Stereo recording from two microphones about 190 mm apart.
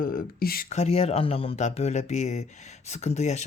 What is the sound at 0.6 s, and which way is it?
Speech, 35° left (ahead or behind).